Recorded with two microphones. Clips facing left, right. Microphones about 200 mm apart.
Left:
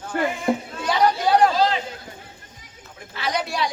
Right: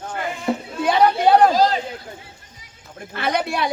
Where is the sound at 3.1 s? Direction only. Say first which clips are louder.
Right 4 dB; 55° right (ahead or behind).